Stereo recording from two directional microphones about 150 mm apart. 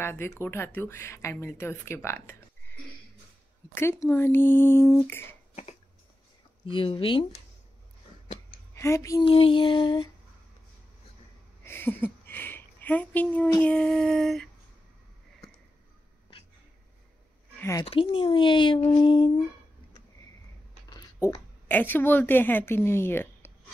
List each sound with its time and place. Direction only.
0.0 s a woman's voice: 15° left (ahead or behind)
6.6 s speech: 35° left (ahead or behind)
8.7 s speech: 20° left (ahead or behind)
9.2 s speech: 35° left (ahead or behind)
11.6 s speech: 15° left (ahead or behind)
13.6 s a sound: 5° left (ahead or behind)
17.6 s speech: 20° left (ahead or behind)
17.8 s speech: 40° left (ahead or behind)
20.9 s a sound: 25° left (ahead or behind)
21.6 s a woman's voice: 15° left (ahead or behind)